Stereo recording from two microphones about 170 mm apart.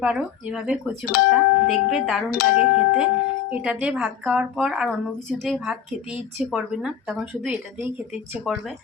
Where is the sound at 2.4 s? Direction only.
40° left (ahead or behind).